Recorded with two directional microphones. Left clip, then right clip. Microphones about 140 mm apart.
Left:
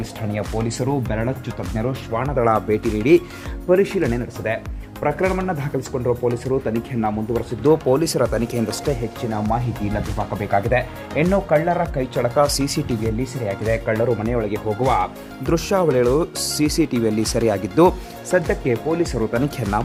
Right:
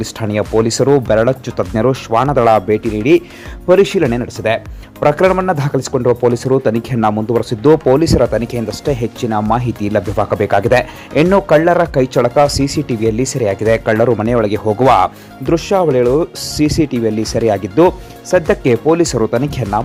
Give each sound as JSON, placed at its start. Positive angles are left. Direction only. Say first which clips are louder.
{"t": 0.0, "sound": "speech", "louder": "right 9 dB", "side_deg": -40}
{"t": 2.2, "sound": "speech", "louder": "right 7 dB", "side_deg": -25}
{"t": 3.7, "sound": "speech", "louder": "right 7 dB", "side_deg": -30}
{"t": 7.6, "sound": "speech", "louder": "right 6 dB", "side_deg": -25}
{"t": 9.3, "sound": "speech", "louder": "right 8 dB", "side_deg": -35}
{"t": 13.1, "sound": "speech", "louder": "right 10 dB", "side_deg": -40}
{"t": 15.4, "sound": "speech", "louder": "right 6 dB", "side_deg": -20}
{"t": 18.4, "sound": "speech", "louder": "right 9 dB", "side_deg": -40}
{"t": 19.3, "sound": "speech", "louder": "right 6 dB", "side_deg": -20}